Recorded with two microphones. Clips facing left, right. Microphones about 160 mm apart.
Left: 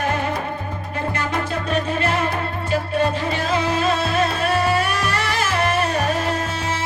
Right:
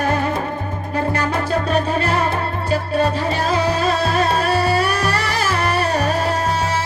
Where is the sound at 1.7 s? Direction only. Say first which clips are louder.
Even; 35° right (ahead or behind).